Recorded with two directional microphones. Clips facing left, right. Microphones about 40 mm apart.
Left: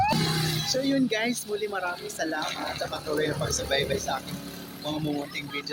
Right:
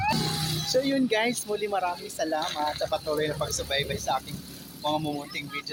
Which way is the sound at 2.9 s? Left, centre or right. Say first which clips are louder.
Left 1 dB; left.